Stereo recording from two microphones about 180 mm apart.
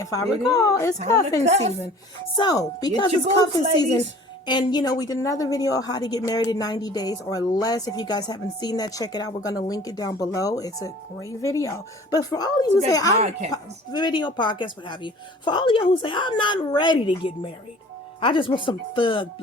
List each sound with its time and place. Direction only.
0.0 s speech: 20° left (ahead or behind)
1.5 s speech: 35° right (ahead or behind)
2.3 s speech: 25° left (ahead or behind)
13.1 s speech: 40° right (ahead or behind)
13.5 s speech: 25° left (ahead or behind)